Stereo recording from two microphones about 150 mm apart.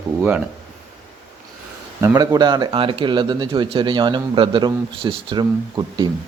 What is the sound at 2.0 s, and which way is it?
A man's voice, 20° right (ahead or behind).